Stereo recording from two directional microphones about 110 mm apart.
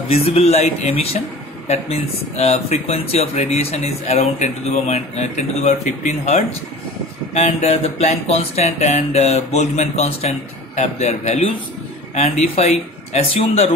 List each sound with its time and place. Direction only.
0.1 s a man's voice: 65° left (ahead or behind); by 5.8 s 85° left
7.3 s speech: 80° left